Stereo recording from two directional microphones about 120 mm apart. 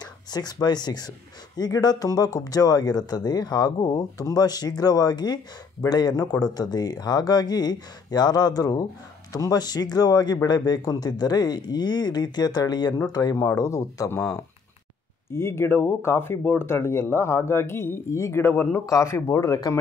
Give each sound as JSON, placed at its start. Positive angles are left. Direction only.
{"t": 0.0, "sound": "speech", "side_deg": 35}
{"t": 15.3, "sound": "speech", "side_deg": 20}